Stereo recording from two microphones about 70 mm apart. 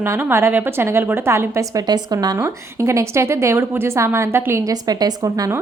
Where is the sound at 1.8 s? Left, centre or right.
Right.